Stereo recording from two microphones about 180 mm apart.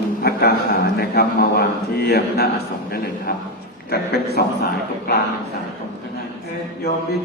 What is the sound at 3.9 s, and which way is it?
Speech, 60° left (ahead or behind).